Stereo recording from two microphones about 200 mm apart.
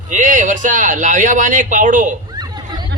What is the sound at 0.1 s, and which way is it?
A woman's voice, 40° right (ahead or behind).